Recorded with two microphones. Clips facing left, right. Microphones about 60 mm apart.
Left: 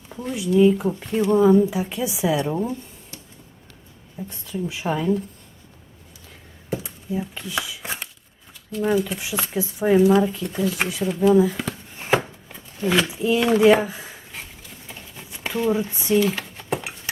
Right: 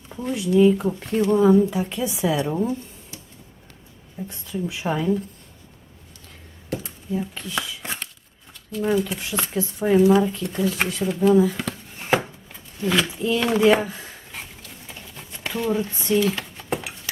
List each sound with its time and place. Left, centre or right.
0.1 s speech: centre
4.2 s speech: centre
6.7 s a sound: centre
8.7 s speech: centre
11.9 s chopping: centre
12.2 s a sound: centre